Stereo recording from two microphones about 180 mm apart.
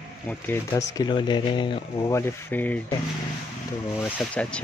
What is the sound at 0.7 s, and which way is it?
Speech, 20° left (ahead or behind).